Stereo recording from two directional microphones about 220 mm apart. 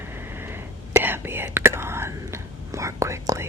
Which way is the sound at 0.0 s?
10° right (ahead or behind).